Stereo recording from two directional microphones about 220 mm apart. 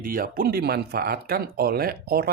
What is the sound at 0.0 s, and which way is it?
Speech, 40° right (ahead or behind).